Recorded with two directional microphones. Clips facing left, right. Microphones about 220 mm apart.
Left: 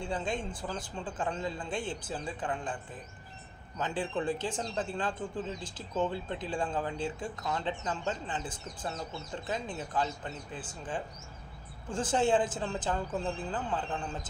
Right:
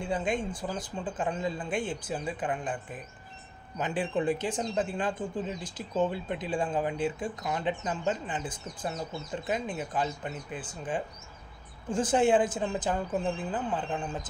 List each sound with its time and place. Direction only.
0.0 s speech: 15° right (ahead or behind)
11.9 s speech: 15° right (ahead or behind)